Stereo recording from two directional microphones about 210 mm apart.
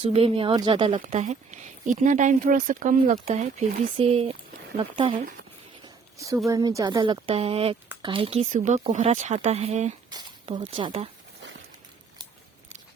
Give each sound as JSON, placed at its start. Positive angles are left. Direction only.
{"t": 0.0, "sound": "a woman's voice", "side_deg": -25}
{"t": 6.1, "sound": "a woman's voice", "side_deg": -15}
{"t": 10.1, "sound": "speech", "side_deg": -20}